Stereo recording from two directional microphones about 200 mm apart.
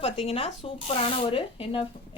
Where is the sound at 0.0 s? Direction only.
30° left (ahead or behind).